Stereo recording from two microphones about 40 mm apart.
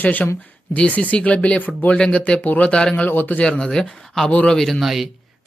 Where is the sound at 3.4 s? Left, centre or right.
Left; by 4.8 s centre.